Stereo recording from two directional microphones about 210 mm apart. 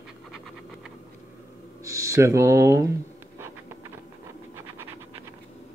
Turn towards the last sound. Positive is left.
turn(degrees=-10)  # may be behind; listen again after turning